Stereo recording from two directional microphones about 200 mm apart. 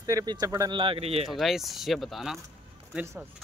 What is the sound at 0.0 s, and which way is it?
Speech, 15° right (ahead or behind).